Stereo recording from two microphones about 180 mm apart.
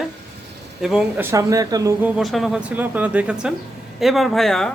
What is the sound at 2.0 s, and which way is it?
Speech, 5° right (ahead or behind).